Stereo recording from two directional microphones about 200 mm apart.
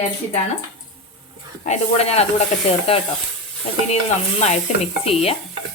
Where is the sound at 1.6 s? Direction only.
35° left (ahead or behind).